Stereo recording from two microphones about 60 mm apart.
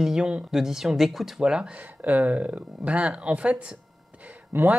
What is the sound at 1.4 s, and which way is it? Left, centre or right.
Speech, centre.